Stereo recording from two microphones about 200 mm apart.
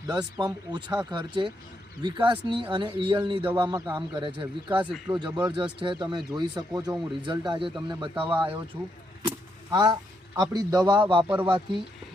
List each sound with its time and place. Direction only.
0.1 s speech: 20° right (ahead or behind)
8.1 s speech: 10° right (ahead or behind); by 11.3 s 25° right (ahead or behind)